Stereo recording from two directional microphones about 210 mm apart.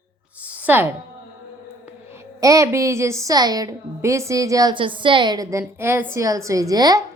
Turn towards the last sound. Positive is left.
turn(degrees=-20)  # may be behind; listen again after turning